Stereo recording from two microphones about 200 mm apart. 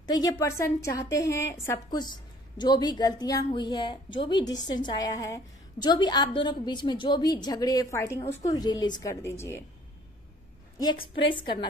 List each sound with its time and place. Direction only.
0.0 s a woman's voice: 20° left (ahead or behind)
10.8 s a woman's voice: 20° left (ahead or behind)